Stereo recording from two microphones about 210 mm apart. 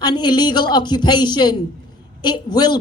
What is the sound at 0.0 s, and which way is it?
A woman's voice, 20° left (ahead or behind).